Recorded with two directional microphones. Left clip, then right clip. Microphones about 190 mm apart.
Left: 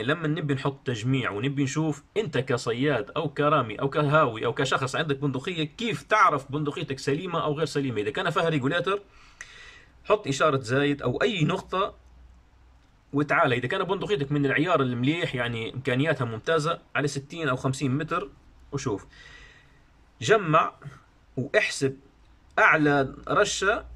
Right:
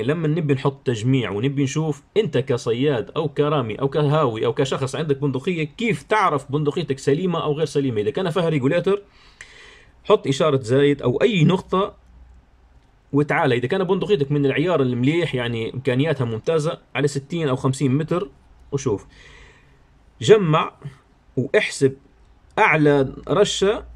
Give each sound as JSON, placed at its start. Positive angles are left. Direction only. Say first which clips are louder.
{"t": 0.0, "sound": "speech", "louder": "right 5 dB", "side_deg": -15}
{"t": 13.1, "sound": "speech", "louder": "right 4 dB", "side_deg": -20}